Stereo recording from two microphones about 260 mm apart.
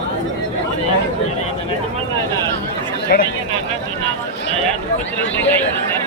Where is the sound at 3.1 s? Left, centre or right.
Left.